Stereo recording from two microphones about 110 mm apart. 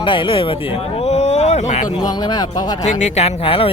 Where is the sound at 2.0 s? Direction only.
40° left (ahead or behind).